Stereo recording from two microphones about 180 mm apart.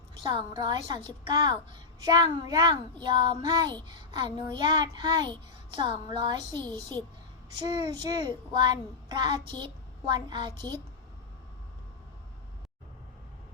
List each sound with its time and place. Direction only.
0.2 s a child's voice: 25° right (ahead or behind)
6.5 s a child's voice: 10° left (ahead or behind)
7.6 s a child's voice: 20° right (ahead or behind)